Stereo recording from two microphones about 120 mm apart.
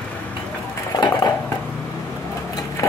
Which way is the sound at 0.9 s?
35° left (ahead or behind).